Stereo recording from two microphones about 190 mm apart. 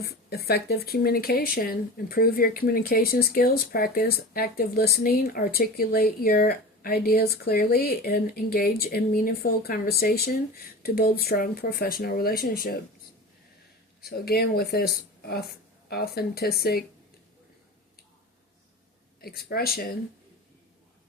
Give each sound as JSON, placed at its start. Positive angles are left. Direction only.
{"t": 0.0, "sound": "speech", "side_deg": 55}
{"t": 14.0, "sound": "speech", "side_deg": 55}
{"t": 19.2, "sound": "speech", "side_deg": 55}